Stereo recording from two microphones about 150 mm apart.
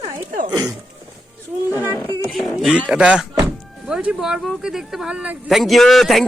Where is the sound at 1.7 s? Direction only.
15° right (ahead or behind).